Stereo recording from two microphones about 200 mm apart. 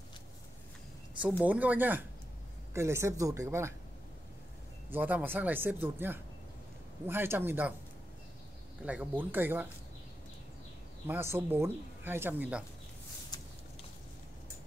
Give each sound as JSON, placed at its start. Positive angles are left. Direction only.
{"t": 1.2, "sound": "speech", "side_deg": -10}
{"t": 4.9, "sound": "speech", "side_deg": -10}
{"t": 8.8, "sound": "speech", "side_deg": -5}
{"t": 11.1, "sound": "speech", "side_deg": -10}
{"t": 13.3, "sound": "a sound", "side_deg": 20}